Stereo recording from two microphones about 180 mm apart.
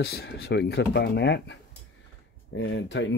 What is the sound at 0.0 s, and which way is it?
Speech, 65° left (ahead or behind).